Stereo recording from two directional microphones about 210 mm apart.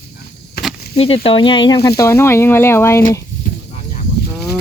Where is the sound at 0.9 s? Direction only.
25° left (ahead or behind).